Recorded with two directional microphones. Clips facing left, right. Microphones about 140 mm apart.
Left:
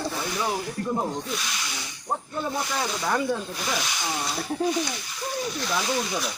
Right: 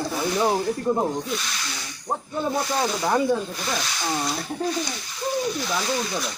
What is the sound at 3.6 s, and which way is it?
Speech, 10° left (ahead or behind).